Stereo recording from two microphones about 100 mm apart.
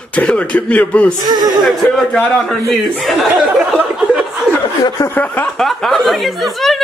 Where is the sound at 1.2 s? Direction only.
45° right (ahead or behind).